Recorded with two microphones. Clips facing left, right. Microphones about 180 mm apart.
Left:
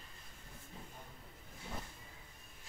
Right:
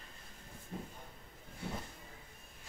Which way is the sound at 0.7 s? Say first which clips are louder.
Right 10 dB; 60° right (ahead or behind).